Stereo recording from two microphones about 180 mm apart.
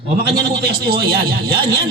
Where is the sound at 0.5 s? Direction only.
60° right (ahead or behind).